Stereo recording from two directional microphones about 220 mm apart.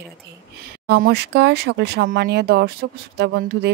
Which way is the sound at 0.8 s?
50° right (ahead or behind).